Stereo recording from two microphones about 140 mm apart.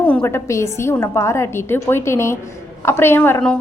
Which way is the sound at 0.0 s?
10° left (ahead or behind).